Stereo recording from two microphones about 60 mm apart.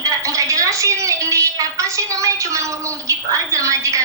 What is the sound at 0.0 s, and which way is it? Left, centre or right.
Speech, right.